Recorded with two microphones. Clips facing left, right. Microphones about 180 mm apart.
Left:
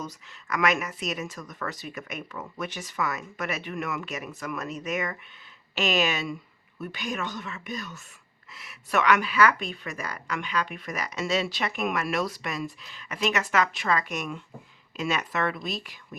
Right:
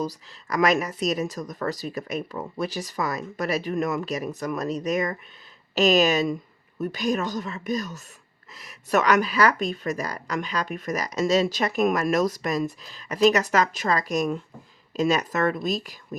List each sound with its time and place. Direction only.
0.0 s speech: 35° right (ahead or behind)